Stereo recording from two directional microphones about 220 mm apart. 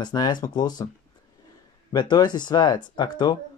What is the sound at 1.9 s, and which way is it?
Speech, 20° left (ahead or behind).